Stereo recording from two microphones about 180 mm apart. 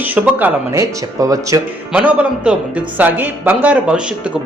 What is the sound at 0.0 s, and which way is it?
Speech, 10° right (ahead or behind).